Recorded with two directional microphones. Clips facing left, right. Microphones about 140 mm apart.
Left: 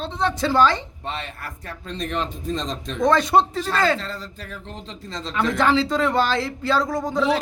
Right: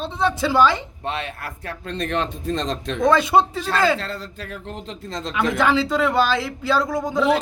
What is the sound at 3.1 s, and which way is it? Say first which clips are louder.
Speech: right 1 dB; 10° right (ahead or behind).